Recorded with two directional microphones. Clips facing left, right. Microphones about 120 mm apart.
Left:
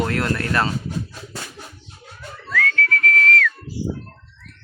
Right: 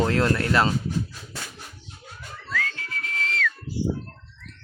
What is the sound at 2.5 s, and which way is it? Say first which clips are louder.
Whistling: left 9 dB; 20° right (ahead or behind).